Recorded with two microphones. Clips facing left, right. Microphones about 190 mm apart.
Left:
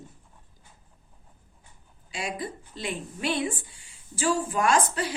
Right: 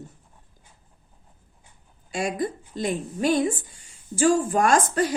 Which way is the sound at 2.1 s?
45° right (ahead or behind).